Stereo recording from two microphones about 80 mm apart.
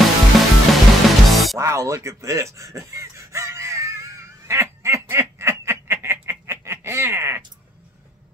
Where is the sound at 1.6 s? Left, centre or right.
Right.